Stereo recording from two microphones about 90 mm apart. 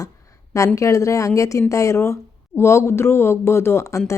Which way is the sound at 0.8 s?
35° left (ahead or behind).